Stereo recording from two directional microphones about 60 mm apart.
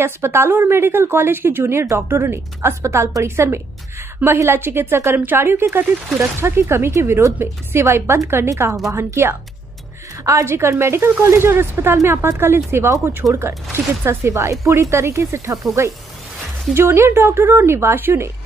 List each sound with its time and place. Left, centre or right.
0.0 s speech: right
10.2 s a woman's voice: right
10.5 s speech: right
14.0 s speech: right